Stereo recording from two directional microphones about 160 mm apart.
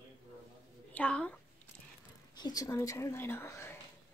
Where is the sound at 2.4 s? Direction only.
20° left (ahead or behind).